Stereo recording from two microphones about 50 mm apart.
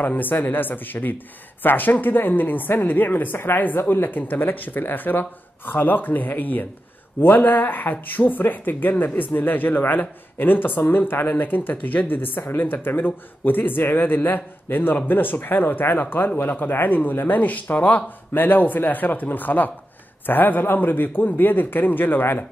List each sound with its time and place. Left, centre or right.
0.0 s speech: left